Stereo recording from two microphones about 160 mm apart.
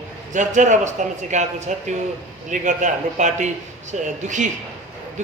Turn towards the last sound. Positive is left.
turn(degrees=-50)  # may be behind; listen again after turning